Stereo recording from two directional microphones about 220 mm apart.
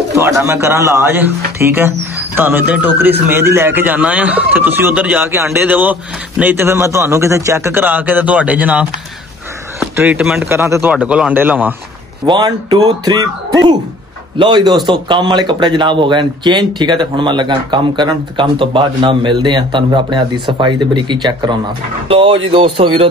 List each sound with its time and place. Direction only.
0.1 s a man's voice: 15° right (ahead or behind)